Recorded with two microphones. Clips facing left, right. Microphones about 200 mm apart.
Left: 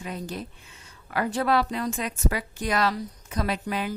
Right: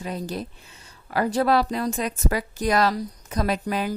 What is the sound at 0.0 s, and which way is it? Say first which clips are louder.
A woman's voice: right 4 dB; 35° right (ahead or behind).